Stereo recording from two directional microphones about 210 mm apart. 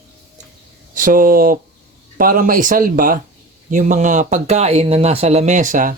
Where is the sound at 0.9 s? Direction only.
40° right (ahead or behind).